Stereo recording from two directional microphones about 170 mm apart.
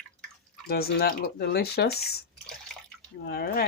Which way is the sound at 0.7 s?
65° left (ahead or behind).